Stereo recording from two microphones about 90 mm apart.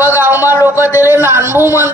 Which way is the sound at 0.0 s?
25° right (ahead or behind).